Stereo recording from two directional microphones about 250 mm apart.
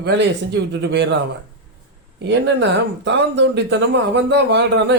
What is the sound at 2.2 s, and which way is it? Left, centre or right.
Speech, right.